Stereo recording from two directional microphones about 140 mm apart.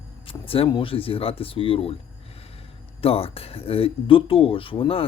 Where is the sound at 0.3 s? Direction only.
40° left (ahead or behind).